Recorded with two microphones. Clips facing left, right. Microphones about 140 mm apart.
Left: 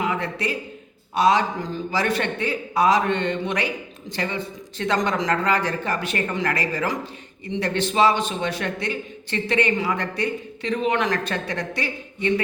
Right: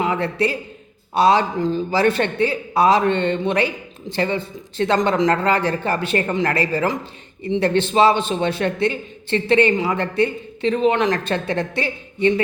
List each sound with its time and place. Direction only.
0.0 s a man's voice: 30° right (ahead or behind)